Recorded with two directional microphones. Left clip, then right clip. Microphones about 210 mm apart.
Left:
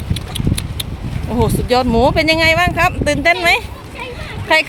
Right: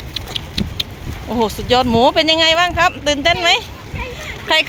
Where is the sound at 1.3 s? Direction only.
5° left (ahead or behind).